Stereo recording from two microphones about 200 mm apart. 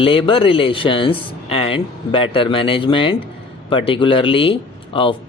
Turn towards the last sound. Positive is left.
turn(degrees=25)  # may be behind; listen again after turning